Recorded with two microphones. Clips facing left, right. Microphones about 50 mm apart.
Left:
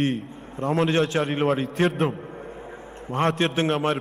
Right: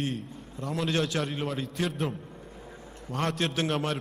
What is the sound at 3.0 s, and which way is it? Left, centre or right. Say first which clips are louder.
Speech: left 7 dB; left.